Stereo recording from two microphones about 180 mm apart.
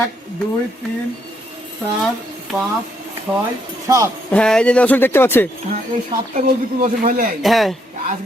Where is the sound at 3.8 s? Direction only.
20° right (ahead or behind).